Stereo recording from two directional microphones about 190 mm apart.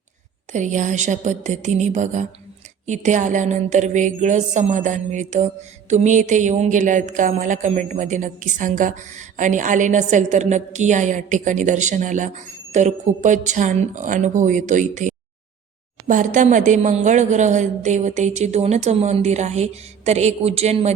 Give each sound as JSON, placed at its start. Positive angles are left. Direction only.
{"t": 0.5, "sound": "speech", "side_deg": -40}